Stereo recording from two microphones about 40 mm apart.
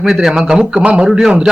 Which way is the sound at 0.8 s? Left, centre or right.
Right.